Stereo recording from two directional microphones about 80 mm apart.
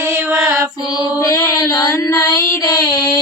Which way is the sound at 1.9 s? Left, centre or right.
Left.